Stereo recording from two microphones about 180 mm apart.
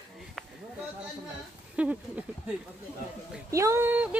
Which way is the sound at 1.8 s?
5° right (ahead or behind).